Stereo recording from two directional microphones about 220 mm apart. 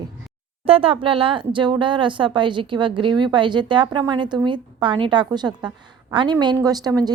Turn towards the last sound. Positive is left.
turn(degrees=-15)  # may be behind; listen again after turning